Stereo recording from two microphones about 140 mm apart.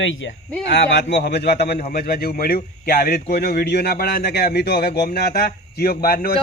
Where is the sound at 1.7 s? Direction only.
90° left.